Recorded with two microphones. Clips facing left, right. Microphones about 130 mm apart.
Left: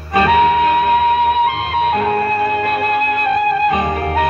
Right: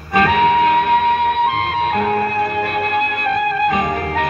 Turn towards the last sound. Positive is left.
turn(degrees=0)  # may be behind; listen again after turning